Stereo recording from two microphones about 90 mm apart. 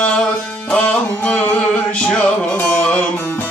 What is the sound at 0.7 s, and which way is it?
Music, 15° left (ahead or behind).